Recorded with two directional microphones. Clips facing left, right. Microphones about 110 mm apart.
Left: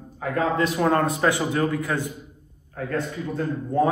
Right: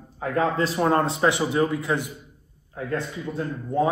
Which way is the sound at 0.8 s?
25° right (ahead or behind).